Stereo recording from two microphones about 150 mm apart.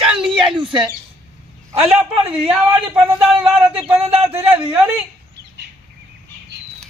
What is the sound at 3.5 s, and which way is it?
Speech, 10° right (ahead or behind).